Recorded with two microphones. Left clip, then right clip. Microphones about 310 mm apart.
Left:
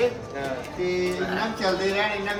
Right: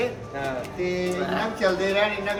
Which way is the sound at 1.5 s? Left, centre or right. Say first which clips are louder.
Right 3 dB; centre.